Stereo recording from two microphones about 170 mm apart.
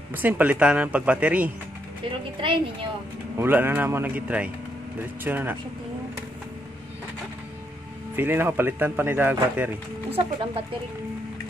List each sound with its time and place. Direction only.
0.1 s speech: 10° right (ahead or behind)
3.3 s speech: 10° right (ahead or behind)
8.2 s speech: 10° right (ahead or behind)
10.1 s speech: 30° right (ahead or behind)